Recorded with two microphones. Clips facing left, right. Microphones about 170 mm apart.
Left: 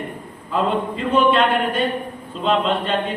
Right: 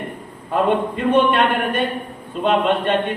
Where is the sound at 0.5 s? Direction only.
60° right (ahead or behind).